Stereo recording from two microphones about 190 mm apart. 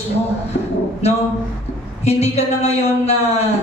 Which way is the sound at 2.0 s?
35° left (ahead or behind).